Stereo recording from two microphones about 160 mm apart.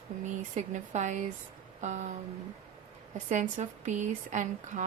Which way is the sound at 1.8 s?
50° right (ahead or behind).